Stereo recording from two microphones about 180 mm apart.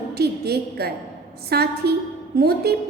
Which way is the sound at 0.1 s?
60° right (ahead or behind).